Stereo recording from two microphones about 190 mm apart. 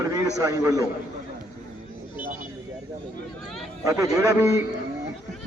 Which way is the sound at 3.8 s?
15° right (ahead or behind).